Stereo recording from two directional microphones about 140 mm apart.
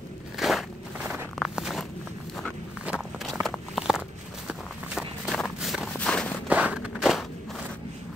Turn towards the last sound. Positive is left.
turn(degrees=0)  # may be behind; listen again after turning